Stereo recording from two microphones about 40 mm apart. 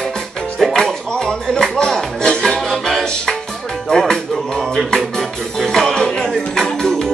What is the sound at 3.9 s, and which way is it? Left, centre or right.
Music, left.